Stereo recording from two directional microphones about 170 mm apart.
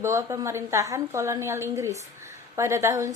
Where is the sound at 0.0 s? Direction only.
15° right (ahead or behind).